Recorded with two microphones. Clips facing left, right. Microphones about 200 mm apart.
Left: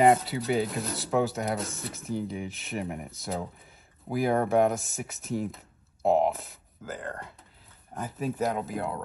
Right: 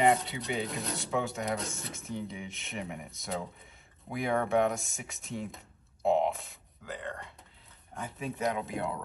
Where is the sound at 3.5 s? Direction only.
Centre (ahead or behind).